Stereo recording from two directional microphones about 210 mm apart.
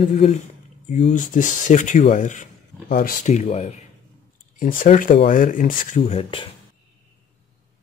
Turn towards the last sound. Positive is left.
turn(degrees=25)  # may be behind; listen again after turning